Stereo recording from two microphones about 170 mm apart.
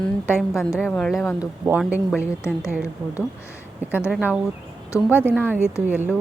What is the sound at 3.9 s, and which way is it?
A woman's voice, 10° right (ahead or behind).